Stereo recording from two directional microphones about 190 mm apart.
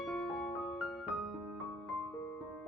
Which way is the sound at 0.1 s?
Centre (ahead or behind).